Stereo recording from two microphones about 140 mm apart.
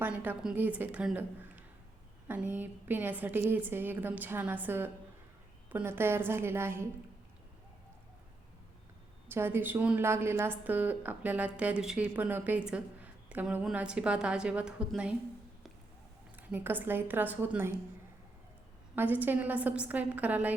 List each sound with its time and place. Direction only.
0.0 s a woman's voice: 15° right (ahead or behind)
9.3 s a woman's voice: 15° right (ahead or behind)
16.5 s a woman's voice: 15° right (ahead or behind)
18.9 s a woman's voice: 15° right (ahead or behind)